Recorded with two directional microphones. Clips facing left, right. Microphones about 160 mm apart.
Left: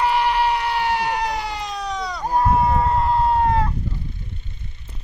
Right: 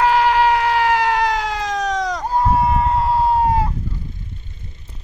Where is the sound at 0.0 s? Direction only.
90° right.